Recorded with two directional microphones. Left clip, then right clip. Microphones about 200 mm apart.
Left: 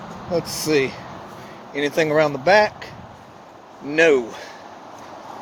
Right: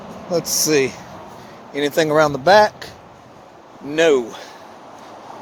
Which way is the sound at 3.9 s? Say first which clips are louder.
Right 1 dB; 20° right (ahead or behind).